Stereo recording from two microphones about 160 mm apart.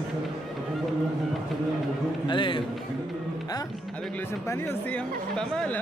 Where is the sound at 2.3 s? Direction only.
30° left (ahead or behind).